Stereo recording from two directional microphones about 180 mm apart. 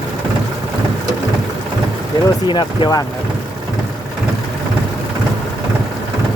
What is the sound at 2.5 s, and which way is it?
Speech, 25° left (ahead or behind).